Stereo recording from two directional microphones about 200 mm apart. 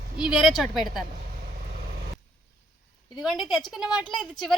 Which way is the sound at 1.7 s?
45° right (ahead or behind).